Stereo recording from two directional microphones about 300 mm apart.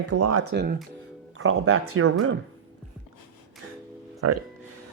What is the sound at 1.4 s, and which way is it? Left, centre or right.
Speech, right.